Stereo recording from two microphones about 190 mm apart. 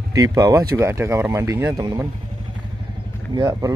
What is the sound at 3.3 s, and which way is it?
Speech, 20° right (ahead or behind).